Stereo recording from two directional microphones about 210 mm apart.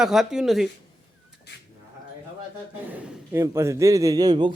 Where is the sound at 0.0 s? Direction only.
Centre (ahead or behind).